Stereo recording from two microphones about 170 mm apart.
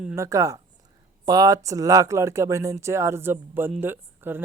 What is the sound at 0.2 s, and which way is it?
A woman's voice, 20° right (ahead or behind).